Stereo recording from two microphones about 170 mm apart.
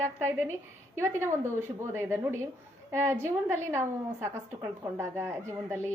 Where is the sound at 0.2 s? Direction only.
15° right (ahead or behind).